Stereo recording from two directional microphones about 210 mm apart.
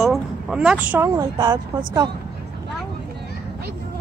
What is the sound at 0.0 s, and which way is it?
A woman's voice, centre (ahead or behind).